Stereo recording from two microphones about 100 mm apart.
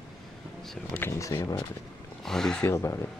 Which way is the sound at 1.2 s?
30° left (ahead or behind).